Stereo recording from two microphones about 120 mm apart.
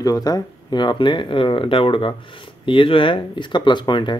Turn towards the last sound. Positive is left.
turn(degrees=40)  # may be behind; listen again after turning